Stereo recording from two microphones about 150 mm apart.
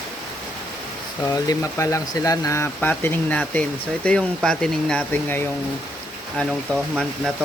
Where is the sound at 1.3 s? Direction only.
20° left (ahead or behind).